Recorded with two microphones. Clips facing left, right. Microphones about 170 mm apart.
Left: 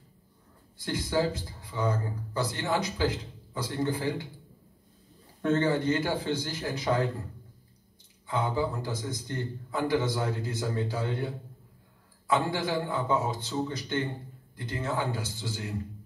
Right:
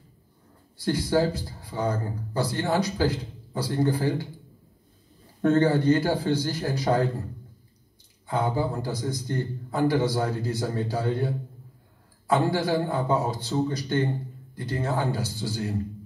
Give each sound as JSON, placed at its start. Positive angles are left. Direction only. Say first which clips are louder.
{"t": 0.8, "sound": "a man's voice", "louder": "right 5 dB", "side_deg": -35}
{"t": 5.4, "sound": "a man's voice", "louder": "right 5 dB", "side_deg": -40}
{"t": 8.3, "sound": "a man's voice", "louder": "right 3 dB", "side_deg": -35}